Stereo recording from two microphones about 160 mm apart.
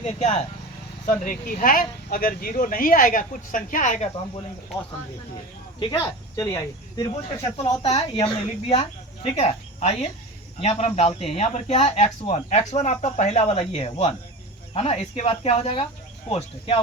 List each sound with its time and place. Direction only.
0.0 s speech: 45° left (ahead or behind)
1.2 s speech: 55° left (ahead or behind)
5.9 s speech: 20° left (ahead or behind)
7.1 s speech: 35° left (ahead or behind)
7.9 s speech: 25° left (ahead or behind)